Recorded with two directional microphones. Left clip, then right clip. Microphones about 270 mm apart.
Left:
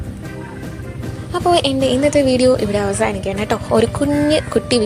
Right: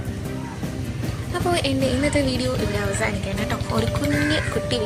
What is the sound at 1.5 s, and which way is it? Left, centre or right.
A woman's voice, left.